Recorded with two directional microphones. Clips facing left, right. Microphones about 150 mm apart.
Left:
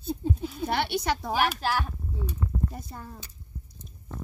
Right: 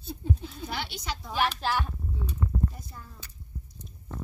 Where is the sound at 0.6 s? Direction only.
60° left (ahead or behind).